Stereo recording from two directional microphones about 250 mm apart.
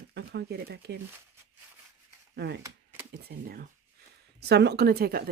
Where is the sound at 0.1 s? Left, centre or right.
Right.